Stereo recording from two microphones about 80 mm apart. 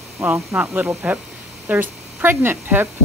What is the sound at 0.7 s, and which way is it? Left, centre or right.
Speech, right.